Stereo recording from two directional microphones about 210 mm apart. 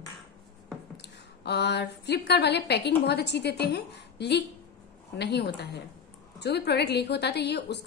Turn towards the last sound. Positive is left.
turn(degrees=50)  # may be behind; listen again after turning